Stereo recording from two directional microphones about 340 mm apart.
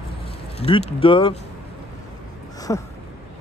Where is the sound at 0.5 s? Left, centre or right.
Centre.